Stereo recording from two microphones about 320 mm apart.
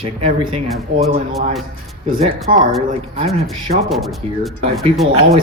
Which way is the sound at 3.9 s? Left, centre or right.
Centre.